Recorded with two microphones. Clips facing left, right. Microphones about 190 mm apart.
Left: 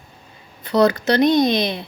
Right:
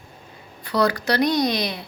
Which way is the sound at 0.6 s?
20° left (ahead or behind).